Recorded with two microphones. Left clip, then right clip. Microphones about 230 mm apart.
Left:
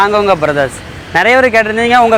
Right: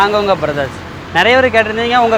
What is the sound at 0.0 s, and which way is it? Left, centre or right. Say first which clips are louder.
Speech: left 2 dB; left.